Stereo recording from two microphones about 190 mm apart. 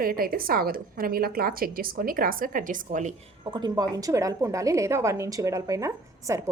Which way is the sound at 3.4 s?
25° right (ahead or behind).